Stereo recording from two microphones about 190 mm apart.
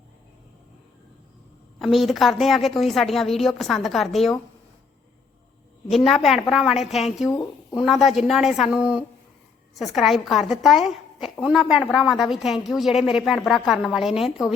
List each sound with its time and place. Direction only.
1.8 s a woman's voice: centre (ahead or behind)
5.9 s a woman's voice: centre (ahead or behind)
7.3 s speech: 15° left (ahead or behind)
7.8 s a woman's voice: centre (ahead or behind)